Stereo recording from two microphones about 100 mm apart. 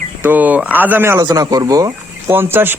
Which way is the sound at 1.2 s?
40° right (ahead or behind).